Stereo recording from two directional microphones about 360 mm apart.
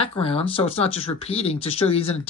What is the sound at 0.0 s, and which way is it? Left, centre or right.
Speech, centre.